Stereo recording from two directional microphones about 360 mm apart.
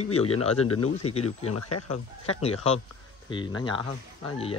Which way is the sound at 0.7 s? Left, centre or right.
Left.